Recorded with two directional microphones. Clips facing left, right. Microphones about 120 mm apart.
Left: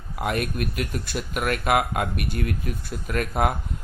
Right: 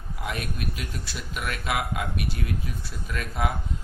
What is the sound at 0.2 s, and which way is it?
Speech, 55° left (ahead or behind).